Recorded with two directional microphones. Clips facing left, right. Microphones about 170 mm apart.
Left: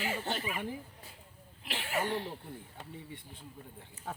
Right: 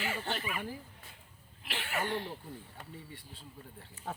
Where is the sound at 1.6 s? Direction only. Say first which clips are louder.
Left 2 dB; 30° left (ahead or behind).